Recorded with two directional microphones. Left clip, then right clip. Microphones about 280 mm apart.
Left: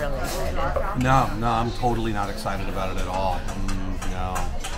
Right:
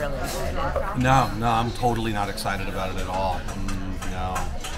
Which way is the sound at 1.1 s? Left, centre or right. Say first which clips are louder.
Even; right.